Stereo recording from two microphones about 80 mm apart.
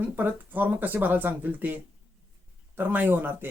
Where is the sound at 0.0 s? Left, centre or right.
Right.